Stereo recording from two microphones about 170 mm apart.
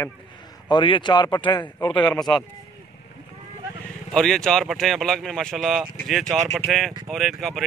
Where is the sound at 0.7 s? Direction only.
30° left (ahead or behind).